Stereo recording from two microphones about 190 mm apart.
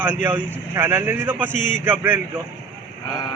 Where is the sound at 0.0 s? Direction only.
10° right (ahead or behind).